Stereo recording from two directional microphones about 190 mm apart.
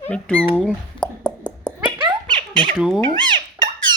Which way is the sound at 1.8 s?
25° right (ahead or behind).